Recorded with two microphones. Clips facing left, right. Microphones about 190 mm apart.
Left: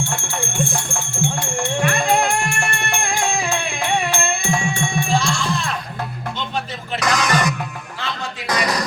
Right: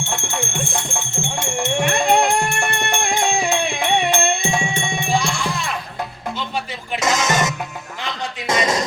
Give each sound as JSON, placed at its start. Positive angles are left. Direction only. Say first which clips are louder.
{"t": 0.0, "sound": "music", "louder": "even", "side_deg": -20}
{"t": 5.2, "sound": "music", "louder": "left 1 dB", "side_deg": -5}
{"t": 7.0, "sound": "music", "louder": "even", "side_deg": -20}